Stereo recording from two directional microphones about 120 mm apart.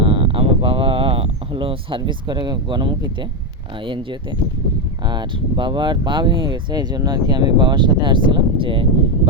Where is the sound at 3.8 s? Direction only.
45° right (ahead or behind).